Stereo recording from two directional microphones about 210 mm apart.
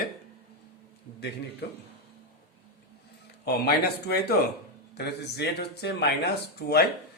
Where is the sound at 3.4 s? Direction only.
50° left (ahead or behind).